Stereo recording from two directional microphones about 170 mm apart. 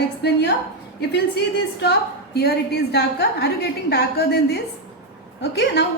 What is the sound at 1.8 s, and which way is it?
A woman's voice, 70° left (ahead or behind).